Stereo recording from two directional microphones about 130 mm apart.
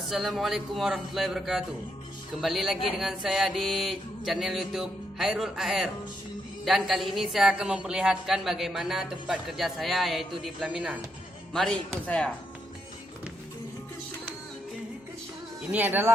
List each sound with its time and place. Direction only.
0.1 s a woman's voice: centre (ahead or behind)
15.7 s speech: 15° right (ahead or behind)